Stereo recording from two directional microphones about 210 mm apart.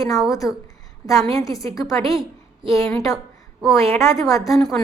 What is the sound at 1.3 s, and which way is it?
A woman's voice, 15° left (ahead or behind).